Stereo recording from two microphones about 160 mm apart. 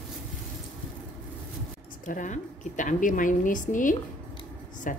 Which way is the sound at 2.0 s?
55° left (ahead or behind).